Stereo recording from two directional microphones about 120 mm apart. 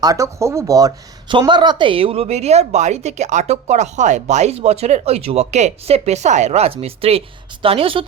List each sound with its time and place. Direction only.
0.0 s speech: 30° right (ahead or behind)
1.3 s a woman's voice: 40° right (ahead or behind)